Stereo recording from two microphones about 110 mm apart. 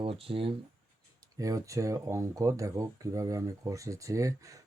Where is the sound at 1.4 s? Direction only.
30° right (ahead or behind).